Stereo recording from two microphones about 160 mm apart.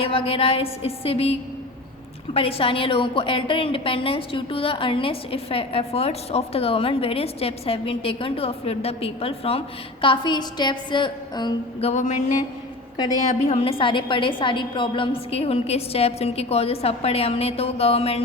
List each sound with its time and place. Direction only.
0.0 s a woman's voice: 35° left (ahead or behind)
11.9 s a sound: 45° left (ahead or behind)
13.2 s a woman's voice: 40° left (ahead or behind)